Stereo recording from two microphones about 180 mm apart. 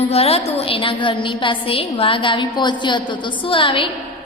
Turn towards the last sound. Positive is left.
turn(degrees=30)  # may be behind; listen again after turning